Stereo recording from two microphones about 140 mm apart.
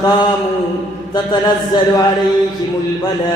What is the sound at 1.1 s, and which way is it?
Speech, 30° left (ahead or behind).